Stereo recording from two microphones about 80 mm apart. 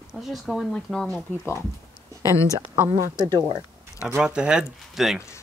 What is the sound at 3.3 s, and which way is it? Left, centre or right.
Speech, right.